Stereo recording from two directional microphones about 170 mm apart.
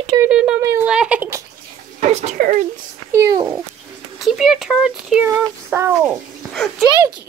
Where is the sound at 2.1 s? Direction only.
40° right (ahead or behind).